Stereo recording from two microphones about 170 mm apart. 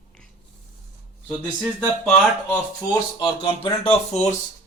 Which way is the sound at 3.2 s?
30° left (ahead or behind).